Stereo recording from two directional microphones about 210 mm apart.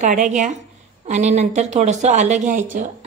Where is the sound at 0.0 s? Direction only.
35° right (ahead or behind).